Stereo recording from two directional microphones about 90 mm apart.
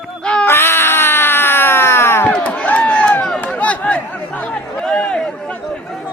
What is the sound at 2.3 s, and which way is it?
Run, 15° left (ahead or behind).